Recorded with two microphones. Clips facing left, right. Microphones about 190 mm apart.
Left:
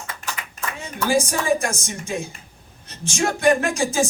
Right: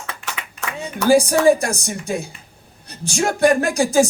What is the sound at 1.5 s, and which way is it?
Speech, 35° right (ahead or behind).